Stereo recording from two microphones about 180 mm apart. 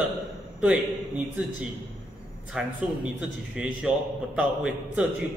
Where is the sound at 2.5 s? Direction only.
5° right (ahead or behind).